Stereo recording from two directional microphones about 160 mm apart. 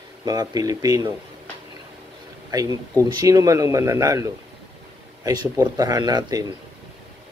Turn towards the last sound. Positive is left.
turn(degrees=-25)  # may be behind; listen again after turning